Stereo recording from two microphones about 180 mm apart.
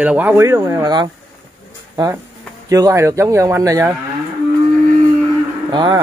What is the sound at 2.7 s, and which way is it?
Speech, 15° right (ahead or behind).